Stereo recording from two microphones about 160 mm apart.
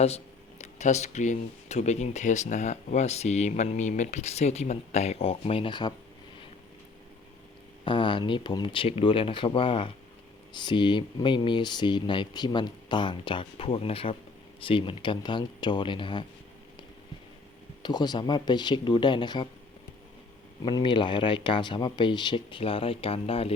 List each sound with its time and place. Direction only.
0.6 s speech: 45° left (ahead or behind)
7.9 s speech: 30° left (ahead or behind)
17.8 s speech: 25° left (ahead or behind)
20.7 s speech: 30° left (ahead or behind)